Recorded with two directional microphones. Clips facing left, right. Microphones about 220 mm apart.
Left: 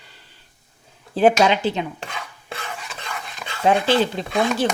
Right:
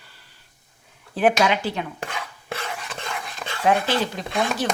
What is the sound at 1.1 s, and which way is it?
Speech, 25° left (ahead or behind).